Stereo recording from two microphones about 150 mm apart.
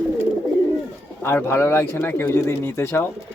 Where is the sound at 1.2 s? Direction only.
15° left (ahead or behind).